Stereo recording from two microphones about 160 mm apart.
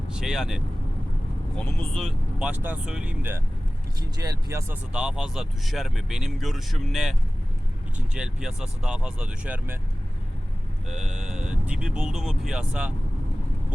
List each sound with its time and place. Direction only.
0.1 s speech: 5° right (ahead or behind)
2.5 s speech: 10° right (ahead or behind)
4.9 s speech: 5° right (ahead or behind)
10.8 s speech: 5° right (ahead or behind)